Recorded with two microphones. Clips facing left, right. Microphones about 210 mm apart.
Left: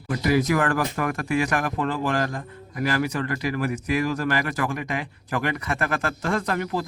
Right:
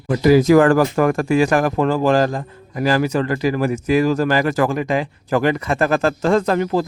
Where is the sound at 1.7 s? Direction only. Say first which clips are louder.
Right 8 dB; 90° right.